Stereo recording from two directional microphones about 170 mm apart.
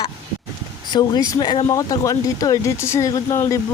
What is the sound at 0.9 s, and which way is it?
Speech, 25° left (ahead or behind).